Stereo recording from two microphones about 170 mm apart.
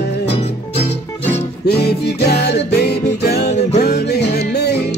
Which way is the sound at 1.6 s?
75° left (ahead or behind).